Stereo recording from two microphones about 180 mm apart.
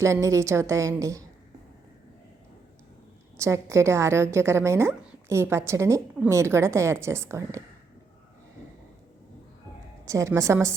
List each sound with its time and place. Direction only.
0.0 s a woman's voice: 15° right (ahead or behind)
3.3 s a woman's voice: 15° right (ahead or behind)
10.1 s a woman's voice: 15° right (ahead or behind)